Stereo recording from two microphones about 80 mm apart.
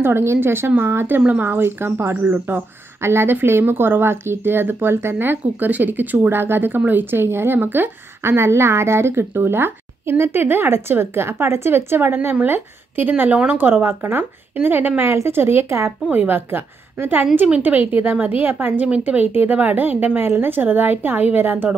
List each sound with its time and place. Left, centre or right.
0.0 s a woman's voice: right